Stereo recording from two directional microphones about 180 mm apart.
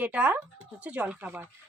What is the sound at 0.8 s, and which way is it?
Speech, 5° right (ahead or behind).